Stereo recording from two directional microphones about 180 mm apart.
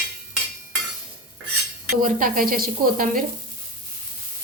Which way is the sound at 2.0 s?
50° right (ahead or behind).